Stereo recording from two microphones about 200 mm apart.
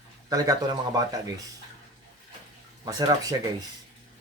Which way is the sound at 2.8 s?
20° right (ahead or behind).